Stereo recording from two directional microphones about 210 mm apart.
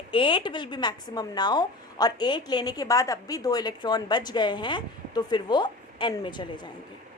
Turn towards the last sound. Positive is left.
turn(degrees=20)  # may be behind; listen again after turning